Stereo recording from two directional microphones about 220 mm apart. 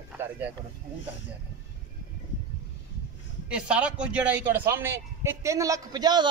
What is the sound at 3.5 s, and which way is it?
A man's voice, 5° right (ahead or behind).